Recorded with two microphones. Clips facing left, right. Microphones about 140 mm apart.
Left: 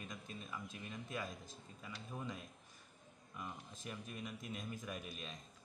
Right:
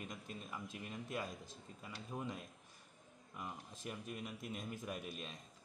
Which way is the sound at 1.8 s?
20° right (ahead or behind).